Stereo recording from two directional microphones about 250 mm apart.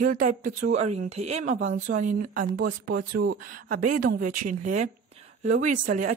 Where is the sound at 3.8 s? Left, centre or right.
Right.